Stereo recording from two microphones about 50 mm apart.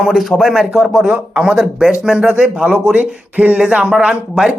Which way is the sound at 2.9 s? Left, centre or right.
Right.